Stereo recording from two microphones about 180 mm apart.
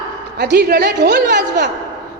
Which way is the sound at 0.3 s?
65° right (ahead or behind).